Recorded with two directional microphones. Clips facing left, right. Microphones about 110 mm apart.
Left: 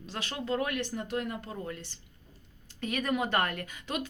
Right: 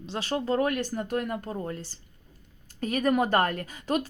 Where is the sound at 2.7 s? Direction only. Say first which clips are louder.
Right 6 dB; 40° right (ahead or behind).